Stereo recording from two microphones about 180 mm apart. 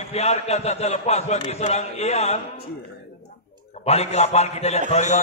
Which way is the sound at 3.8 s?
35° left (ahead or behind).